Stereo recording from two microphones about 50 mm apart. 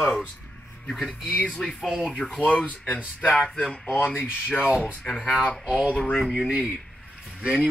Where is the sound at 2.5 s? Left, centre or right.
Left.